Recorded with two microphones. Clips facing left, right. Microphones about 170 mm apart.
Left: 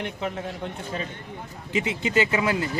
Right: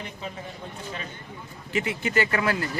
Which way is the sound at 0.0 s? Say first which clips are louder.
Left 6 dB; 80° left.